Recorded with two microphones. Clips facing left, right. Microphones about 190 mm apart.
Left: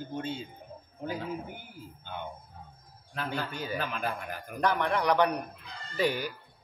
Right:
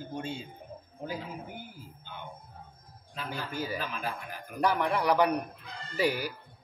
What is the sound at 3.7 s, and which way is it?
Speech, 55° left (ahead or behind).